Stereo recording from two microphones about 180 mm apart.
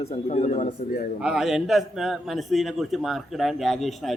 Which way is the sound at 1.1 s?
5° right (ahead or behind).